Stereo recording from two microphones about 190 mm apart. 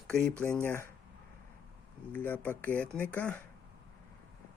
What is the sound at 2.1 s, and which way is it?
Speech, 10° left (ahead or behind).